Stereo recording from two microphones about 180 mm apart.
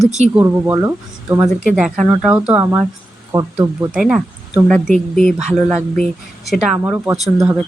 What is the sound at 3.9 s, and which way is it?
Speech, 5° right (ahead or behind).